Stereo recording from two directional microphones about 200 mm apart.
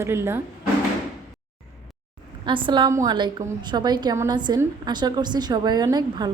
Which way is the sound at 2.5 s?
25° right (ahead or behind).